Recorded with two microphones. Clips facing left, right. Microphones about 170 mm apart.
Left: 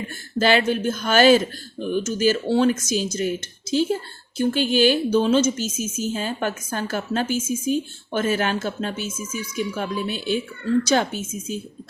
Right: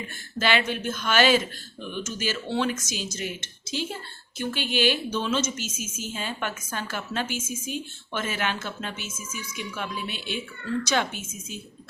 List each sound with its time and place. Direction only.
0.3 s a woman's voice: 40° left (ahead or behind)